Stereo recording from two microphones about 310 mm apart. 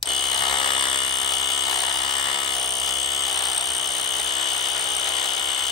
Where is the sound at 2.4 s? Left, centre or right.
Centre.